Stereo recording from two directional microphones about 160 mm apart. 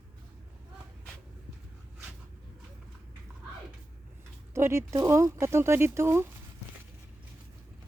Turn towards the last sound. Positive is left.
turn(degrees=-15)  # may be behind; listen again after turning